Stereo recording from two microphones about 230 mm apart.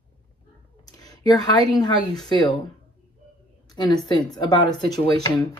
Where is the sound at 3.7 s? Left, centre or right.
Centre.